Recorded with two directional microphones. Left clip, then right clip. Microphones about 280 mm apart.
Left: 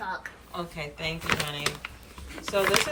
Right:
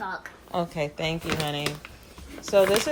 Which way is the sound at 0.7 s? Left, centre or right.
Centre.